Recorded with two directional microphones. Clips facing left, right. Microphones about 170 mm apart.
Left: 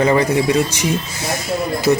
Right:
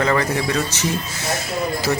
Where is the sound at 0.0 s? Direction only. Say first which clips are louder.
Left 5 dB; 15° left (ahead or behind).